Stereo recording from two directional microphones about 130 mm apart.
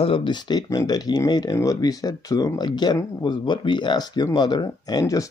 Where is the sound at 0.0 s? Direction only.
40° left (ahead or behind).